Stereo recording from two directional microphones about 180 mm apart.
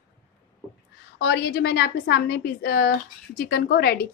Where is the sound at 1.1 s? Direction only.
65° left (ahead or behind).